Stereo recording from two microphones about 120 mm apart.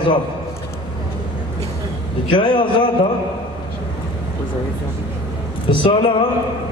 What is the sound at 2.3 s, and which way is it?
Speech, 40° left (ahead or behind).